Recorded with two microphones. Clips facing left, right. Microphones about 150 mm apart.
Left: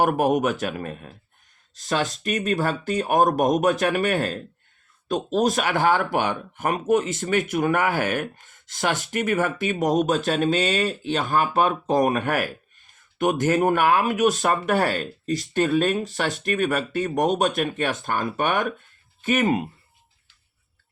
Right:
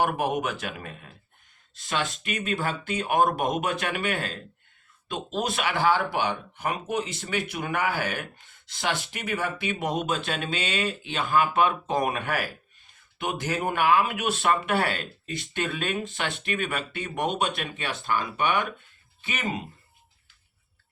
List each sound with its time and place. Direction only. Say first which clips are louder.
0.0 s speech: left 6 dB; 45° left (ahead or behind)